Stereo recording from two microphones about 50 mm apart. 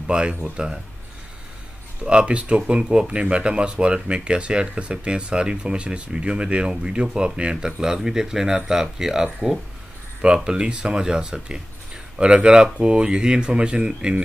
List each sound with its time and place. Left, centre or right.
0.0 s speech: centre
2.0 s speech: right